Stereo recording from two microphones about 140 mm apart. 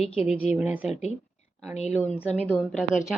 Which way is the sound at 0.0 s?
45° left (ahead or behind).